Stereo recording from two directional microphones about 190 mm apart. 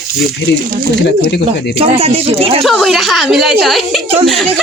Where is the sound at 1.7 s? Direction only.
30° right (ahead or behind).